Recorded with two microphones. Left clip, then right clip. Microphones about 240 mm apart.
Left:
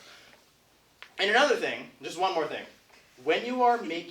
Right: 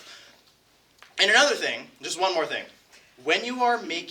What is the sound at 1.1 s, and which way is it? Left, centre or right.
Speech, right.